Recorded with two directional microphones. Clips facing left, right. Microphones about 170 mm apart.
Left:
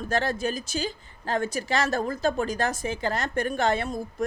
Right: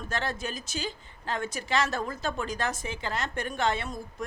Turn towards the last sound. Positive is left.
turn(degrees=40)  # may be behind; listen again after turning